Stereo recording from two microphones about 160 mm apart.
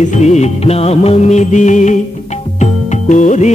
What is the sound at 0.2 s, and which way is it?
Music, 45° left (ahead or behind).